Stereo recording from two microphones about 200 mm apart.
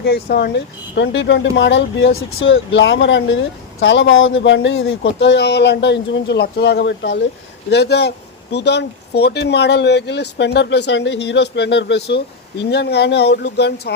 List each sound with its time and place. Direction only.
0.0 s speech: 55° left (ahead or behind)